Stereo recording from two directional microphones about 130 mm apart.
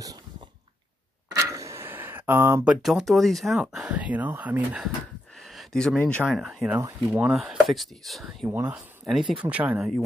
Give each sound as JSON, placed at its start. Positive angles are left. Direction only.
{"t": 1.3, "sound": "a sound", "side_deg": -25}
{"t": 2.6, "sound": "speech", "side_deg": -5}
{"t": 5.4, "sound": "a sound", "side_deg": 0}
{"t": 5.9, "sound": "speech", "side_deg": 10}
{"t": 8.5, "sound": "speech", "side_deg": -15}
{"t": 9.8, "sound": "speech", "side_deg": 0}